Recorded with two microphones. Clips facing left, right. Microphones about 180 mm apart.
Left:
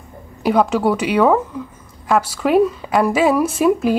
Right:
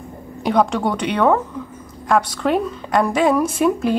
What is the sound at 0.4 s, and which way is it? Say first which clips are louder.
A woman's voice: left 2 dB; 5° left (ahead or behind).